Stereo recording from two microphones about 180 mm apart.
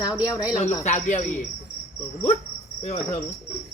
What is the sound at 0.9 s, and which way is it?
Cricket, 40° left (ahead or behind).